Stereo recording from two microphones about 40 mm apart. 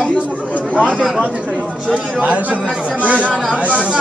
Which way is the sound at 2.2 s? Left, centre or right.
Right.